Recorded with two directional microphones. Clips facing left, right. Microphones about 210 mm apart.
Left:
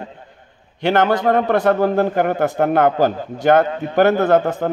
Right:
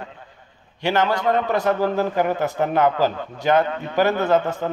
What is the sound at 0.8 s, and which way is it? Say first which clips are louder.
A man's voice: left 4 dB; 55° left (ahead or behind).